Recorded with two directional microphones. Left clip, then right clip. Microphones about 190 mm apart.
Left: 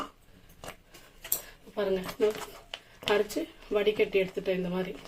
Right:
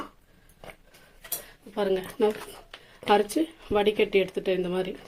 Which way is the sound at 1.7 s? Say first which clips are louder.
Right 3 dB; 50° right (ahead or behind).